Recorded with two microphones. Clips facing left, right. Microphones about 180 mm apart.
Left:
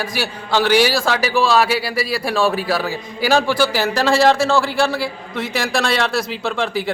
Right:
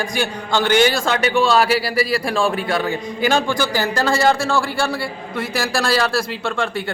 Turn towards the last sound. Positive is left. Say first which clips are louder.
# left 1 dB
turn(degrees=0)  # may be behind; listen again after turning